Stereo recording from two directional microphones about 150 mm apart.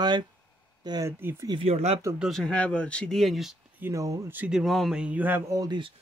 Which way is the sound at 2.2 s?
5° left (ahead or behind).